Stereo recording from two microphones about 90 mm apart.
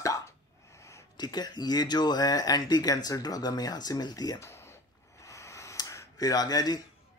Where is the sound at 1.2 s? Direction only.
50° left (ahead or behind).